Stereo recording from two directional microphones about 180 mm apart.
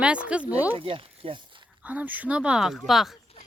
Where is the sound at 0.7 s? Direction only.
30° right (ahead or behind).